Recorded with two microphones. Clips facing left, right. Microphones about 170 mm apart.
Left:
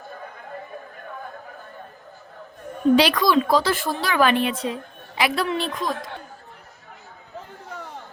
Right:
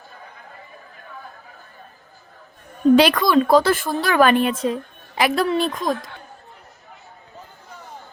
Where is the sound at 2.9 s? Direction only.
50° right (ahead or behind).